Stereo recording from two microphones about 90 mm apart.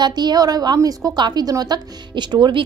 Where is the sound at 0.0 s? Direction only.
50° right (ahead or behind).